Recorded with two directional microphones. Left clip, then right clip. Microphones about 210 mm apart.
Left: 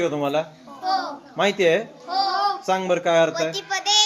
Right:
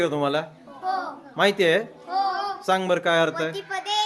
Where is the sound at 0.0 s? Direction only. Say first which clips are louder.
Left 1 dB; 15° right (ahead or behind).